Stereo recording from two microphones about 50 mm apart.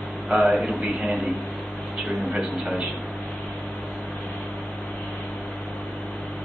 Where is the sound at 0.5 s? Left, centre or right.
Right.